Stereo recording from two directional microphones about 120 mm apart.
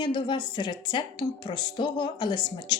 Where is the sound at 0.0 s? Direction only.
35° left (ahead or behind).